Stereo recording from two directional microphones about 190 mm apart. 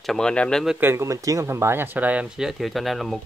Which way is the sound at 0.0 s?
5° left (ahead or behind).